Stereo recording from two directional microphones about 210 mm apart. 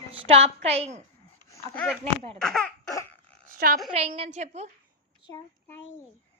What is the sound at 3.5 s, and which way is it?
Speech, 40° right (ahead or behind).